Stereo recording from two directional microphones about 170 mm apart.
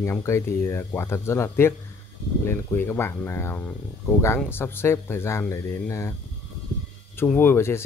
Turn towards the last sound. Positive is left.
turn(degrees=15)  # may be behind; listen again after turning